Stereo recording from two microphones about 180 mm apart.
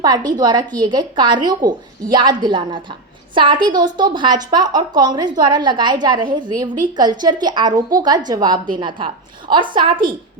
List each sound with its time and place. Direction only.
0.3 s a woman's voice: 20° right (ahead or behind)